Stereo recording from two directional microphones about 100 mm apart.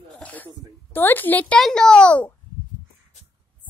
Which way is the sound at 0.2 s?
15° left (ahead or behind).